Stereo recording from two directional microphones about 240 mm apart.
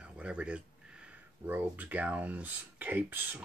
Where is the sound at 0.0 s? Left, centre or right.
Centre.